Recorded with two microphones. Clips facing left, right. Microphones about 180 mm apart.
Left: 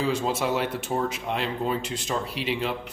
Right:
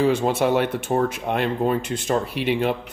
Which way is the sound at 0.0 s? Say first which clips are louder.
Right 6 dB; 60° right (ahead or behind).